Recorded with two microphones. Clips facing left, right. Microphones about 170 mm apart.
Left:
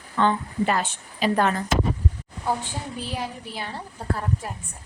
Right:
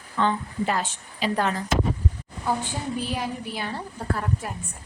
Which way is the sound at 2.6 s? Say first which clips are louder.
Right 4 dB; 30° left (ahead or behind).